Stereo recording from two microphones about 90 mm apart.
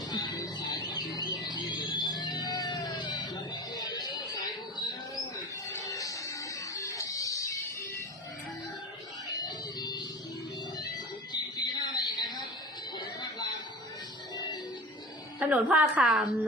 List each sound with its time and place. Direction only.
0.1 s music: 50° left (ahead or behind)
5.6 s music: 35° left (ahead or behind)
6.7 s a sound: 35° left (ahead or behind)
9.4 s music: 50° left (ahead or behind)
11.3 s a sound: 50° left (ahead or behind)
15.4 s a woman's voice: 15° right (ahead or behind)